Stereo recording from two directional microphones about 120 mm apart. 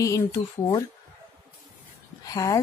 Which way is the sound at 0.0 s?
25° left (ahead or behind).